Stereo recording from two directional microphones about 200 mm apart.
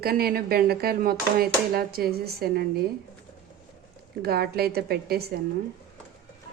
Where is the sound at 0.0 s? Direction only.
50° right (ahead or behind).